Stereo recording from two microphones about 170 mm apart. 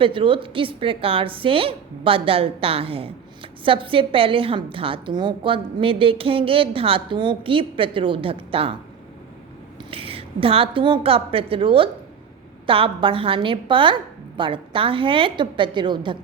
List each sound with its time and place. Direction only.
0.0 s a woman's voice: 30° right (ahead or behind)
9.9 s a woman's voice: 35° right (ahead or behind)